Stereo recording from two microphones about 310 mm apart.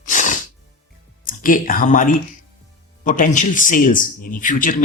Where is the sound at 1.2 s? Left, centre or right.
Left.